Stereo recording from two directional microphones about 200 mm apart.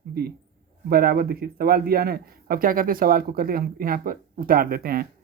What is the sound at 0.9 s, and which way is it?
A man's voice, 50° right (ahead or behind).